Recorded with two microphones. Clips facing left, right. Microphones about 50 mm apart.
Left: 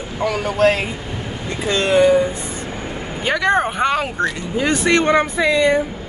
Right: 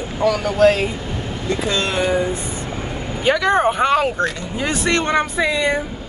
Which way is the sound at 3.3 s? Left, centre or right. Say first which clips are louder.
Right 2 dB; centre.